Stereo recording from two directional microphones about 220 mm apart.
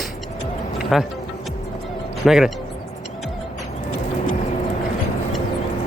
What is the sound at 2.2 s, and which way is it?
Speech, centre (ahead or behind).